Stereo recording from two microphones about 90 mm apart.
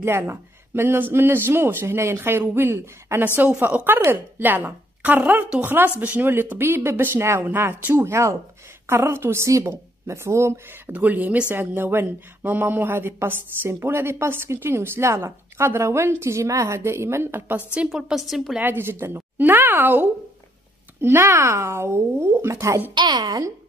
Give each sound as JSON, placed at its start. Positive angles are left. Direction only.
{"t": 0.0, "sound": "speech", "side_deg": -25}
{"t": 10.9, "sound": "speech", "side_deg": -20}
{"t": 17.8, "sound": "a woman's voice", "side_deg": -5}
{"t": 18.6, "sound": "speech", "side_deg": -25}
{"t": 22.9, "sound": "a woman's voice", "side_deg": -55}
{"t": 23.2, "sound": "speech", "side_deg": -40}